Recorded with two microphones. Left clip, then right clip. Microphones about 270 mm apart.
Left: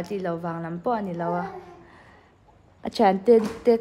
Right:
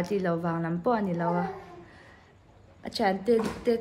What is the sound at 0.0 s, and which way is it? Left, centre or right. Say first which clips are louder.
Speech: even; centre.